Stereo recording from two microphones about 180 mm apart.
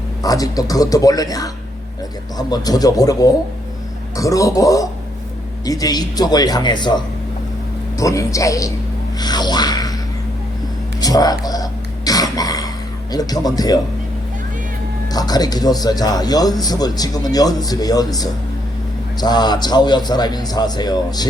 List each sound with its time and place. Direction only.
0.2 s a man's voice: 20° left (ahead or behind)
2.5 s a man's voice: 20° left (ahead or behind)
11.0 s a sound: 20° left (ahead or behind)
15.1 s a man's voice: 20° left (ahead or behind)